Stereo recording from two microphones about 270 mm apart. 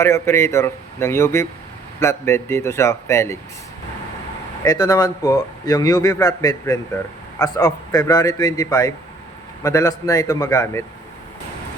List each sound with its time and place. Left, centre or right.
0.0 s a man's voice: centre
4.6 s a man's voice: centre